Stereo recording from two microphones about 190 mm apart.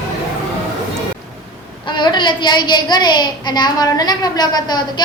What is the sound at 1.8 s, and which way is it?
A woman's voice, 25° left (ahead or behind).